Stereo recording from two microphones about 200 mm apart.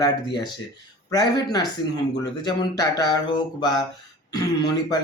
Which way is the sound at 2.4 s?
20° left (ahead or behind).